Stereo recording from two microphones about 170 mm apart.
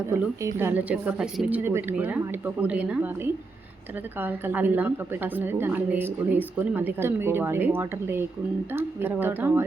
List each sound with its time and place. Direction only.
0.1 s a woman's voice: 15° right (ahead or behind)
4.2 s a woman's voice: 10° right (ahead or behind)